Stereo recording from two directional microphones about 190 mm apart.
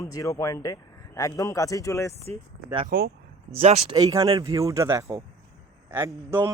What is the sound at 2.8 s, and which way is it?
Speech, 55° right (ahead or behind).